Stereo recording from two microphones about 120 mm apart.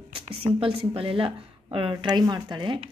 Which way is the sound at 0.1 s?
50° right (ahead or behind).